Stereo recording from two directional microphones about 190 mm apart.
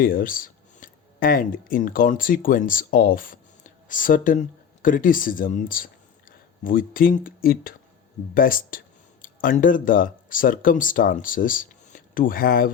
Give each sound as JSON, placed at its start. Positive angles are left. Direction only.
{"t": 0.0, "sound": "speech", "side_deg": 50}